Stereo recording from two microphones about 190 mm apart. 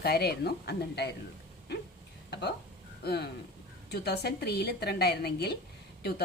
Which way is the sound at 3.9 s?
60° left (ahead or behind).